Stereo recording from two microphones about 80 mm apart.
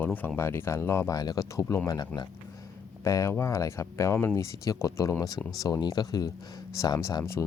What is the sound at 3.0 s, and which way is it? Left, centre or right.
Speech, left.